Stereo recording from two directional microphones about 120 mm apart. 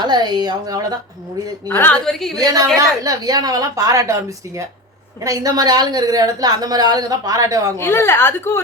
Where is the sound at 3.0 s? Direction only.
30° right (ahead or behind).